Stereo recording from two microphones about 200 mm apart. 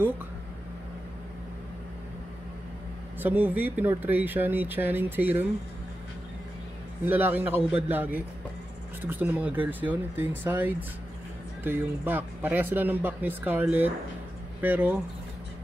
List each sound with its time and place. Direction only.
3.2 s speech: 10° right (ahead or behind)
7.1 s speech: 10° right (ahead or behind)